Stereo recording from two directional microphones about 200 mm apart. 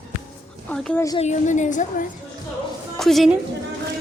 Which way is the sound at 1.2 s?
35° left (ahead or behind).